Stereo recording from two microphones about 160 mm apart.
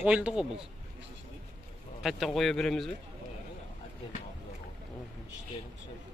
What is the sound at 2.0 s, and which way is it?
Speech, centre (ahead or behind).